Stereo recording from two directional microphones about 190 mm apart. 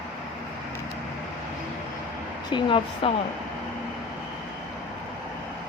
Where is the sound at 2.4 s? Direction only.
25° left (ahead or behind).